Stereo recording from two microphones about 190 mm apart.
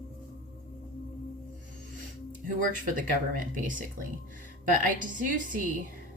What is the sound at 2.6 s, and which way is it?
Speech, 45° right (ahead or behind).